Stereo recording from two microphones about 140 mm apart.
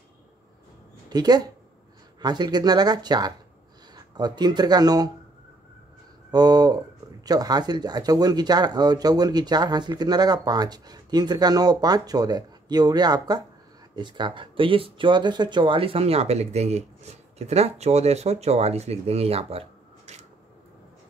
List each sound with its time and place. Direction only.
1.1 s speech: 30° right (ahead or behind)
6.3 s speech: 30° right (ahead or behind); by 20.2 s 50° right (ahead or behind)